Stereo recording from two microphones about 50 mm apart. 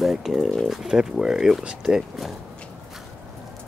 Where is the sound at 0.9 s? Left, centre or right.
Centre.